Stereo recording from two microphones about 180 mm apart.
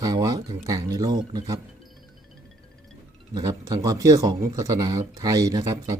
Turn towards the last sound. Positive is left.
turn(degrees=-20)  # may be behind; listen again after turning